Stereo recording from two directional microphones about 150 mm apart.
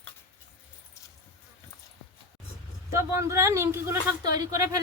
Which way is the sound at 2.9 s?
20° right (ahead or behind).